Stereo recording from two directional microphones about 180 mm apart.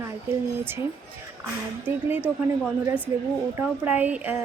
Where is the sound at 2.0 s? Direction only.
10° right (ahead or behind).